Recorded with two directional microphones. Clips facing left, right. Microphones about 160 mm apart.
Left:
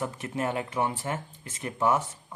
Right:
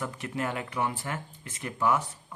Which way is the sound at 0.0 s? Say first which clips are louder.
Left 2 dB; 25° left (ahead or behind).